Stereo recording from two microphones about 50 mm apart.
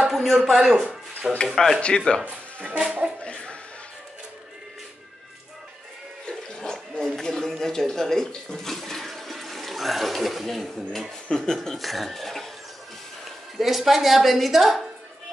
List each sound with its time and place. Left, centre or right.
0.1 s a sound: centre
0.5 s speech: centre
2.2 s speech: right
3.2 s speech: left
6.2 s a sound: centre
11.2 s speech: centre
13.6 s speech: centre